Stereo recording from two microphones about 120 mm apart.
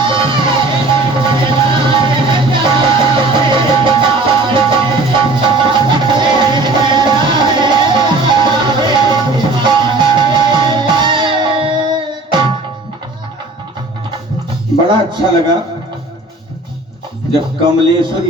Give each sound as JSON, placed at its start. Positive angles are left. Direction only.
{"t": 0.0, "sound": "music", "side_deg": -45}
{"t": 17.3, "sound": "a man's voice", "side_deg": -40}